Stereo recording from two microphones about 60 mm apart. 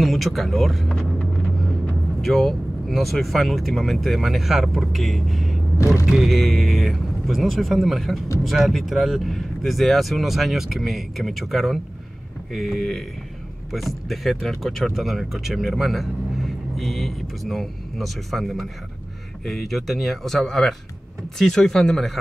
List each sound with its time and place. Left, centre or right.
0.0 s speech: centre